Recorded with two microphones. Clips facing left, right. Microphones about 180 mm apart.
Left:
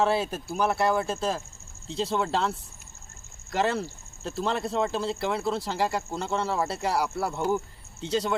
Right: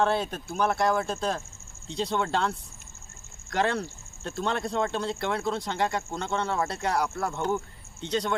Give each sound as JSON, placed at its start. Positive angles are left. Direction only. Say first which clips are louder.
{"t": 0.0, "sound": "speech", "louder": "left 1 dB", "side_deg": 5}